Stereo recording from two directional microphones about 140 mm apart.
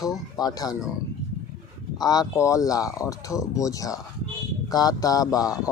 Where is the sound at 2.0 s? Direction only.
30° left (ahead or behind).